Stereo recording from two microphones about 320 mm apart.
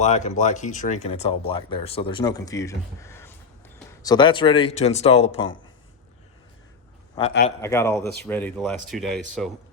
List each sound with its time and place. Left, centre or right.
0.0 s speech: left
7.6 s speech: centre